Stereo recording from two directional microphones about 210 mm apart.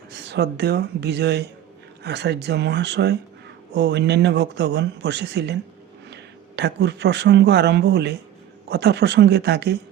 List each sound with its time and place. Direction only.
0.1 s speech: 55° right (ahead or behind)
6.6 s speech: 55° right (ahead or behind)